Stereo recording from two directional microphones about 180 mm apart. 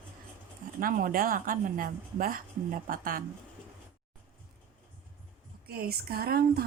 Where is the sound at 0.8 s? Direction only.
50° right (ahead or behind).